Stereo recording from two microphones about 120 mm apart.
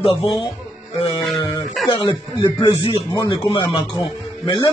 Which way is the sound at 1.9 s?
35° left (ahead or behind).